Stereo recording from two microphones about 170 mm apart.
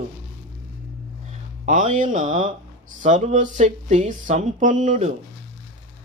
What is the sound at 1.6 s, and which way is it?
Speech, 50° right (ahead or behind).